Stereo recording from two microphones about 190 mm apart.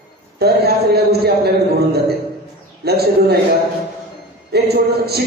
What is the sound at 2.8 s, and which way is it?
Speech, 55° right (ahead or behind).